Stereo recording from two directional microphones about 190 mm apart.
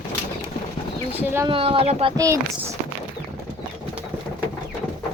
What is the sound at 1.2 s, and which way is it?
Speech, 10° right (ahead or behind).